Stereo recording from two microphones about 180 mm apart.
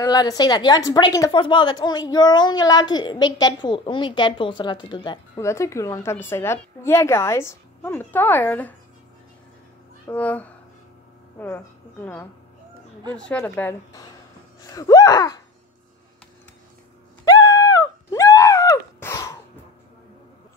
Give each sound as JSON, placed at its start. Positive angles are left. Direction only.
{"t": 0.0, "sound": "a woman's voice", "side_deg": 20}
{"t": 10.0, "sound": "a woman's voice", "side_deg": 10}
{"t": 17.2, "sound": "a sound", "side_deg": 20}